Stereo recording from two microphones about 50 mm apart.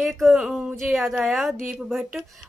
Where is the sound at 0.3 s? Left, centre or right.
Centre.